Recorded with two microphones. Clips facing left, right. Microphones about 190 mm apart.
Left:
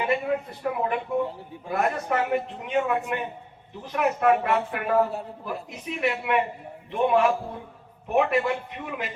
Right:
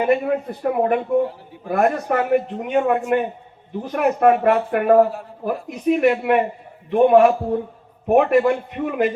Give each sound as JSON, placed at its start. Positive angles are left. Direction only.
{"t": 0.0, "sound": "a man's voice", "side_deg": -50}